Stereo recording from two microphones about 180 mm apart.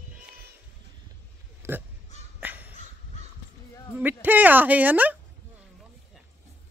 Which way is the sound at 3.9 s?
10° right (ahead or behind).